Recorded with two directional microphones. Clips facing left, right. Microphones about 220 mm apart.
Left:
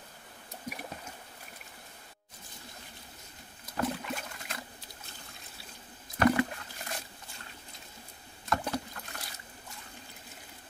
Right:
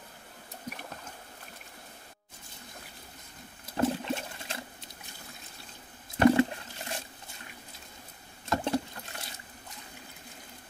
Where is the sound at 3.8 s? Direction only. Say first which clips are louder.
Right 5 dB; 25° right (ahead or behind).